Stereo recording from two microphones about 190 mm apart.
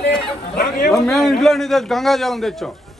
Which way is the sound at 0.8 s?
Centre (ahead or behind).